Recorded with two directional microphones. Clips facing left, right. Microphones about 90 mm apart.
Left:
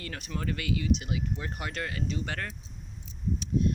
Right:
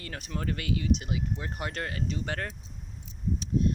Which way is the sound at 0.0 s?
30° right (ahead or behind).